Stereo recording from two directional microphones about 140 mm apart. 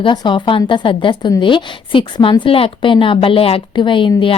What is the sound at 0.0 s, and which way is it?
A woman's voice, 35° left (ahead or behind).